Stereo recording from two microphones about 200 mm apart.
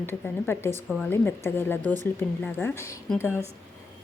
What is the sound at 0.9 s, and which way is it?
A woman's voice, centre (ahead or behind).